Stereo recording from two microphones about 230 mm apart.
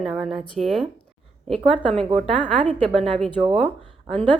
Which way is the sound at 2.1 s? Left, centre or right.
Right.